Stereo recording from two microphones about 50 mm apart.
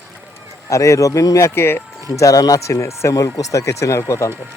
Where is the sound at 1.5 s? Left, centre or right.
Left.